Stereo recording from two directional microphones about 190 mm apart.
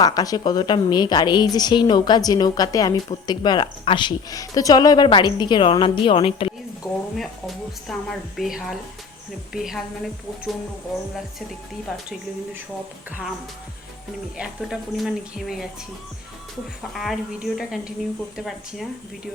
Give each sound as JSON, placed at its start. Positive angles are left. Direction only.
{"t": 0.0, "sound": "a woman's voice", "side_deg": 20}
{"t": 6.8, "sound": "a woman's voice", "side_deg": 0}
{"t": 13.1, "sound": "speech", "side_deg": -10}
{"t": 14.3, "sound": "a woman's voice", "side_deg": -5}
{"t": 16.9, "sound": "a woman's voice", "side_deg": 0}